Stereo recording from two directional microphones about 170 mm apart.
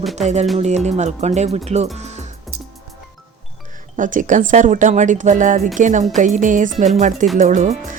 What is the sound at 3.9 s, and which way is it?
Speech, 50° right (ahead or behind).